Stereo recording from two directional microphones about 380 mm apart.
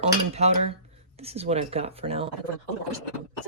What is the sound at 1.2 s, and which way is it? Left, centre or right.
Speech, centre.